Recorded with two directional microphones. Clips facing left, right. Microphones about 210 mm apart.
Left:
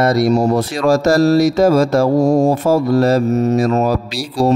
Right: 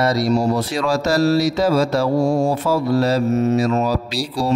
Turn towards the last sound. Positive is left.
turn(degrees=45)  # may be behind; listen again after turning